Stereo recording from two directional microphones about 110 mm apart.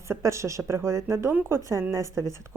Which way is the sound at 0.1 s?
25° right (ahead or behind).